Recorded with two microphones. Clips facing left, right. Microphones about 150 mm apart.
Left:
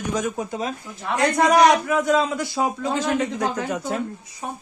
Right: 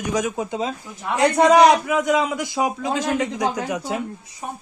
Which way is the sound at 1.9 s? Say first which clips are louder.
Even; 15° right (ahead or behind).